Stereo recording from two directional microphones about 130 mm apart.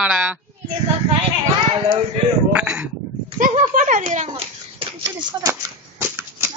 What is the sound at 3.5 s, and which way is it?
Speech, 65° right (ahead or behind).